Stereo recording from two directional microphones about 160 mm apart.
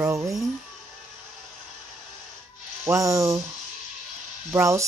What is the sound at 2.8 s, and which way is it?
Speech, 20° right (ahead or behind).